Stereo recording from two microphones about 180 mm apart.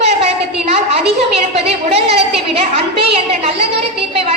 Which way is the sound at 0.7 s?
35° right (ahead or behind).